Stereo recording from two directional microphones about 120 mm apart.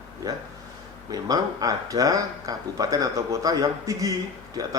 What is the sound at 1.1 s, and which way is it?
A man's voice, 30° right (ahead or behind).